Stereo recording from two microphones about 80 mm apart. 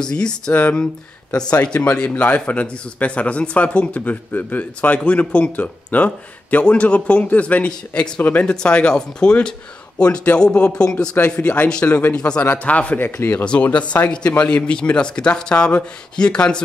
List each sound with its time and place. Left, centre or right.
0.0 s a man's voice: centre
13.4 s speech: centre